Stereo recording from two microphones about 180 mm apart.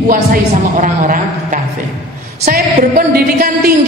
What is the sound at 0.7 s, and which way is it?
A man's voice, 45° right (ahead or behind).